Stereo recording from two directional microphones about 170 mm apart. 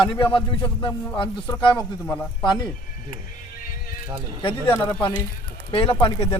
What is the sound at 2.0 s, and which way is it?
Speech, 10° left (ahead or behind).